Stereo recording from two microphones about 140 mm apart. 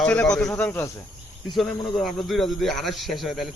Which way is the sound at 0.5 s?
15° left (ahead or behind).